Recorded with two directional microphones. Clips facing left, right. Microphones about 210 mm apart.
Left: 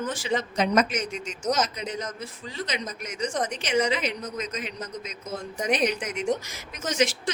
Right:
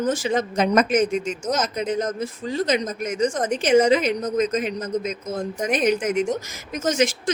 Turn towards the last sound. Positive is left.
turn(degrees=-45)  # may be behind; listen again after turning